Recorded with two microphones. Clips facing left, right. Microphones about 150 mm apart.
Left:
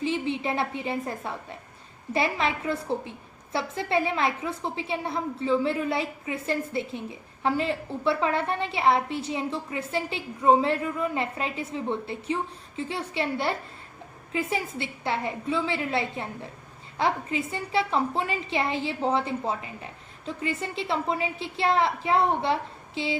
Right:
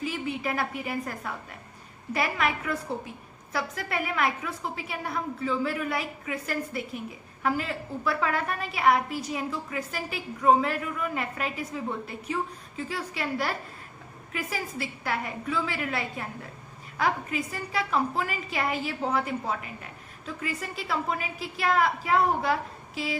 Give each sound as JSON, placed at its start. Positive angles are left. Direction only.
{"t": 0.0, "sound": "a woman's voice", "side_deg": 25}